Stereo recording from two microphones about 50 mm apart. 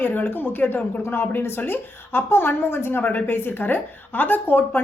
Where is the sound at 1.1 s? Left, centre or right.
Left.